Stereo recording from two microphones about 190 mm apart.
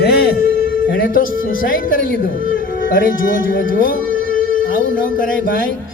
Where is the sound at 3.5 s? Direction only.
45° left (ahead or behind).